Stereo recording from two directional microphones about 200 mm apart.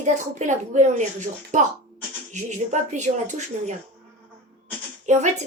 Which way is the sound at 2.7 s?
35° right (ahead or behind).